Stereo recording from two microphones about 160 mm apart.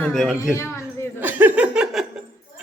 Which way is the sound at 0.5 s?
15° left (ahead or behind).